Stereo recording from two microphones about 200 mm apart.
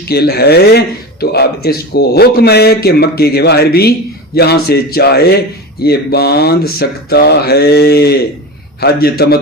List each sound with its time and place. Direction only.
0.1 s a man's voice: 50° left (ahead or behind)